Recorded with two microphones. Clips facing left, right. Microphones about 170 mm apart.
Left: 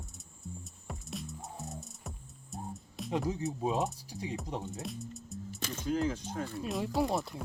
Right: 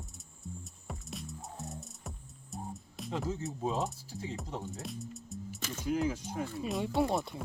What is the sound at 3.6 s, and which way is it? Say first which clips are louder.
Speech: left 1 dB; 15° left (ahead or behind).